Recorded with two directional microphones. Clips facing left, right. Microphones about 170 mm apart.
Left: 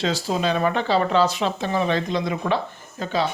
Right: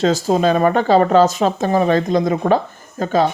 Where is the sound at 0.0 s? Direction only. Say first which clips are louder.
Right 8 dB; 45° right (ahead or behind).